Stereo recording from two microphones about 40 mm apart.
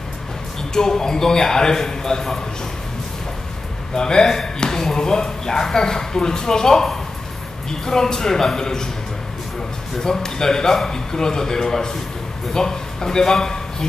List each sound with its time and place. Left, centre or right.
0.7 s speech: centre
3.9 s speech: centre
10.0 s a man's voice: centre